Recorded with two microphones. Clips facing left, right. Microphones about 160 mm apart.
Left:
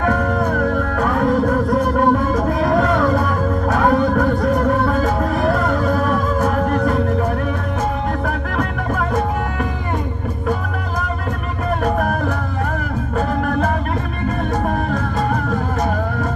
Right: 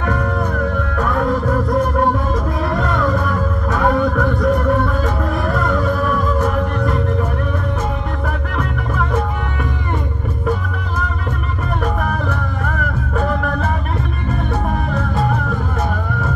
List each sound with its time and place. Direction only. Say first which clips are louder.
0.0 s music: left 2 dB; 45° left (ahead or behind)
2.6 s music: left 4 dB; 40° left (ahead or behind)
11.8 s music: left 2 dB; 45° left (ahead or behind)